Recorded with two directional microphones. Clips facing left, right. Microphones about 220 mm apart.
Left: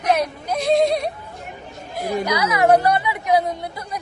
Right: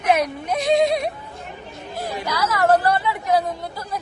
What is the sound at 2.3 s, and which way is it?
Speech, 20° left (ahead or behind).